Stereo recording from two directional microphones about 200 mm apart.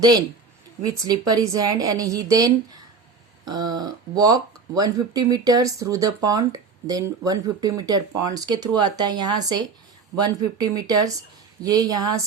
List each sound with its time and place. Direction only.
0.0 s speech: 20° right (ahead or behind)